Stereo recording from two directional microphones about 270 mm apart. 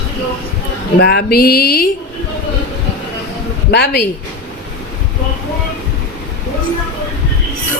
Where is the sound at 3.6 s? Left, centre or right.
Left.